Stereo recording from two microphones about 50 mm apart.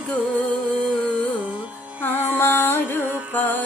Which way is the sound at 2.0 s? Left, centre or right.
Left.